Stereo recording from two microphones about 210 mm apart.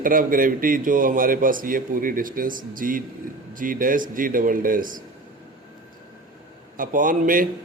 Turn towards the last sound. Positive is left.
turn(degrees=-40)  # may be behind; listen again after turning